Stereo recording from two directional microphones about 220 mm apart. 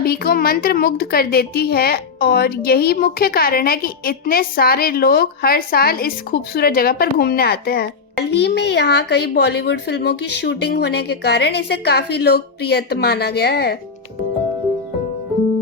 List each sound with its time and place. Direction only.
0.0 s a woman's voice: 45° left (ahead or behind)